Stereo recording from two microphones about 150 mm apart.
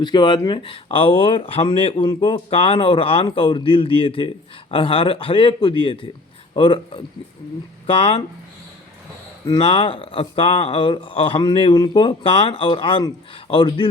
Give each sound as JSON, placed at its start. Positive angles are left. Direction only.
{"t": 0.0, "sound": "speech", "side_deg": 30}
{"t": 9.5, "sound": "speech", "side_deg": 40}